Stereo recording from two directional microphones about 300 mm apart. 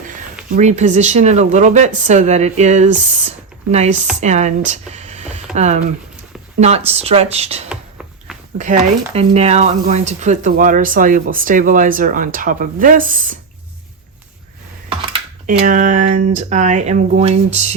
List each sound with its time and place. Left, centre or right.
0.5 s speech: right
14.8 s speech: centre